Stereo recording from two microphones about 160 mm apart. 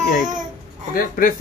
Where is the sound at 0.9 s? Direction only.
60° left (ahead or behind).